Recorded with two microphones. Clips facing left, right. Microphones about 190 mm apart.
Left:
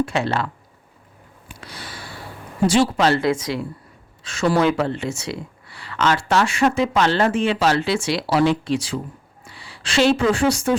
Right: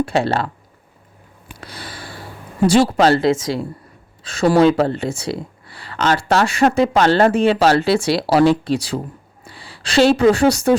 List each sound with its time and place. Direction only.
0.0 s speech: 35° right (ahead or behind)
2.6 s speech: 40° right (ahead or behind)